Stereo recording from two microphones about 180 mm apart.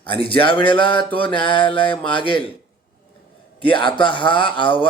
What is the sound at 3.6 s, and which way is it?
Speech, 25° left (ahead or behind).